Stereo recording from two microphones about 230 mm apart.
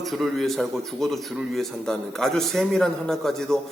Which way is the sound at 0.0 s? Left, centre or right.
Centre.